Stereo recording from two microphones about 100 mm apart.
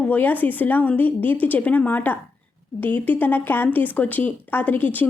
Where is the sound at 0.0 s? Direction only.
15° left (ahead or behind).